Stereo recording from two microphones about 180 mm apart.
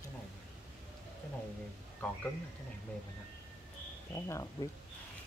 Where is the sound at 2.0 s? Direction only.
5° left (ahead or behind).